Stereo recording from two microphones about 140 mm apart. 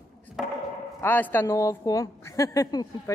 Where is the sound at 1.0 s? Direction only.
15° left (ahead or behind).